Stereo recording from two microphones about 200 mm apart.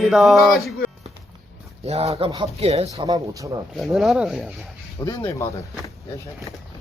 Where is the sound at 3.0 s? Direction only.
20° right (ahead or behind).